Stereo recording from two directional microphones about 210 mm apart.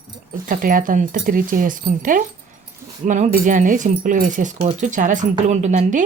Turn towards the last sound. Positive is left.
turn(degrees=-35)  # may be behind; listen again after turning